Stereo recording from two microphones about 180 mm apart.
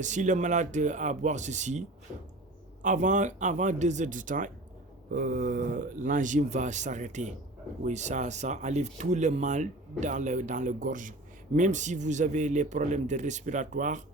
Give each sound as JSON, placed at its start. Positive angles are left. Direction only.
{"t": 0.0, "sound": "a man's voice", "side_deg": -40}
{"t": 2.8, "sound": "a man's voice", "side_deg": -45}